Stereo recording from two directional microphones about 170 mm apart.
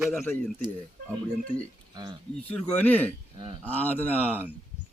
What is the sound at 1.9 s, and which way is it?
Speech, 25° right (ahead or behind).